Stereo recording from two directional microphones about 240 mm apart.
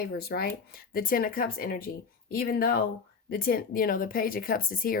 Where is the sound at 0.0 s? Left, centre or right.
Left.